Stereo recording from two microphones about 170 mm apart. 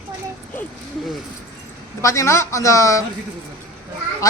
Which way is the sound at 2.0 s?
15° left (ahead or behind).